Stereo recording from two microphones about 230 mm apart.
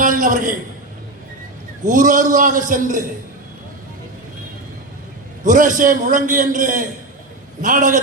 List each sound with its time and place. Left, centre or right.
0.0 s a sound: right
1.8 s a man's voice: right
5.4 s a man's voice: right